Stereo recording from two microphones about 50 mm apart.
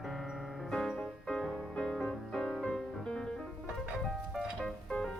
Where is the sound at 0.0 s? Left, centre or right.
Centre.